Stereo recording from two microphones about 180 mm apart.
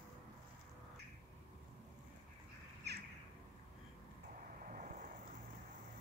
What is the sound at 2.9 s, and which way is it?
Bird, 65° right (ahead or behind).